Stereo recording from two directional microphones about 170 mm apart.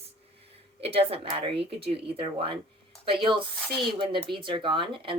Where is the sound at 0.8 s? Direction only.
35° right (ahead or behind).